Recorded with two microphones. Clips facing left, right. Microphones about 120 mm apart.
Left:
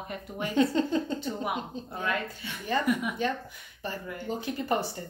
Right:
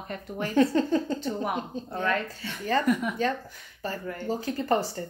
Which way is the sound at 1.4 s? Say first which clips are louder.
Right 2 dB; 10° left (ahead or behind).